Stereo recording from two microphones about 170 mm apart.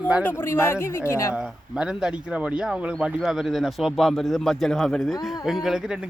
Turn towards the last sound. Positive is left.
turn(degrees=-5)  # may be behind; listen again after turning